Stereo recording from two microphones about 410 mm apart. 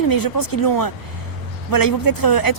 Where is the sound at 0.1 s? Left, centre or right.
Left.